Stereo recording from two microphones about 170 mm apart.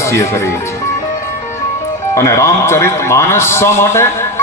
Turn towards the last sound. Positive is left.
turn(degrees=15)  # may be behind; listen again after turning